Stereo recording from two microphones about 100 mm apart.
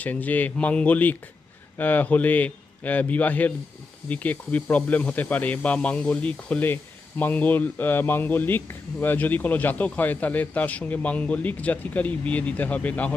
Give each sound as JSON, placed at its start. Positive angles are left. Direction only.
{"t": 0.0, "sound": "a man's voice", "side_deg": 15}